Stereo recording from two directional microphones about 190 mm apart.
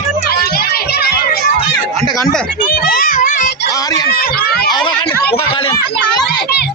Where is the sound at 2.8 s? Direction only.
50° left (ahead or behind).